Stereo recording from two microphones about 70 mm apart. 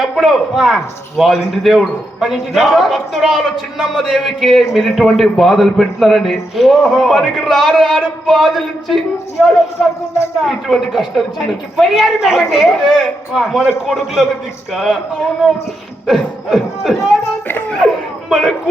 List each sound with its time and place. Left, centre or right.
0.0 s a man's voice: centre
13.6 s a man's voice: centre
13.9 s a man's voice: centre
16.0 s a man's voice: centre
17.5 s laughter: left
18.3 s speech: centre